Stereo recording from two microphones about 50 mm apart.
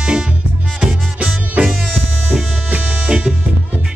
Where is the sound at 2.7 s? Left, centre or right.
Right.